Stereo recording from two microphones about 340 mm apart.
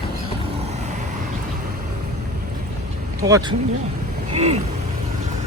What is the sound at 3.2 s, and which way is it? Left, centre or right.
Speech, centre.